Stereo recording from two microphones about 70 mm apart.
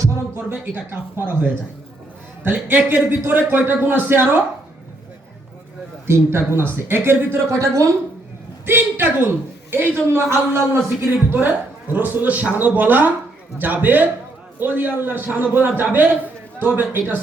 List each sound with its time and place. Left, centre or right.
0.3 s a man's voice: right
2.4 s a man's voice: right
6.1 s speech: right
8.6 s speech: right
11.3 s a man's voice: right